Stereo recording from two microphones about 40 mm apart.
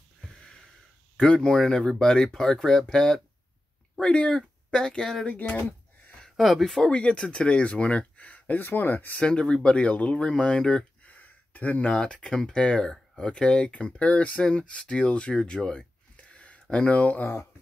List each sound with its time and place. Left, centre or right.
0.4 s a sound: centre
1.1 s speech: left
6.3 s speech: centre
6.9 s speech: left
8.2 s a sound: left
8.5 s speech: left
9.2 s speech: left
10.2 s speech: centre
11.1 s a sound: left
12.0 s speech: centre; by 14.4 s left
14.4 s speech: left
16.2 s a sound: left
16.7 s speech: left